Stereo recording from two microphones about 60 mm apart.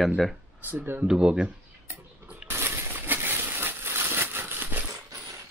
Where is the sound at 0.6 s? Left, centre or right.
Right.